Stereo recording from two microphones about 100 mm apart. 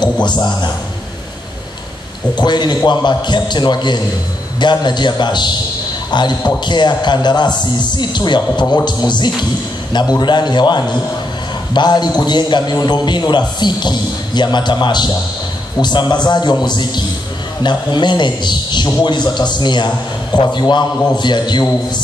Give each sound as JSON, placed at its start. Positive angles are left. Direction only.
{"t": 0.0, "sound": "a man's voice", "side_deg": 45}
{"t": 2.3, "sound": "a man's voice", "side_deg": 45}